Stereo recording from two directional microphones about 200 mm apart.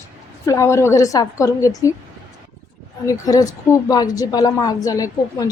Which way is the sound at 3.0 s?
15° left (ahead or behind).